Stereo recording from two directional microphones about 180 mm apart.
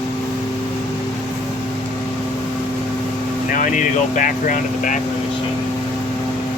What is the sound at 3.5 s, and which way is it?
Speech, 45° left (ahead or behind).